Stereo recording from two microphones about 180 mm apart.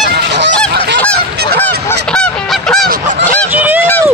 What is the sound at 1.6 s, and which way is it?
Goose, 10° left (ahead or behind).